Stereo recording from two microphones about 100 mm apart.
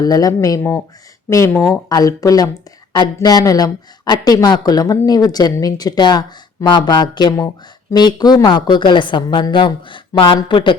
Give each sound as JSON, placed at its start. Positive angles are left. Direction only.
{"t": 0.0, "sound": "a woman's voice", "side_deg": 40}